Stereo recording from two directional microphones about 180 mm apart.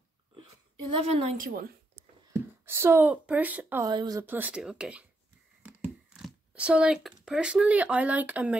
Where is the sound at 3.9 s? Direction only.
25° right (ahead or behind).